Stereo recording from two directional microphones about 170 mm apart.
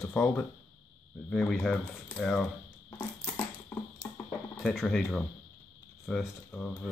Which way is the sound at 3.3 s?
20° left (ahead or behind).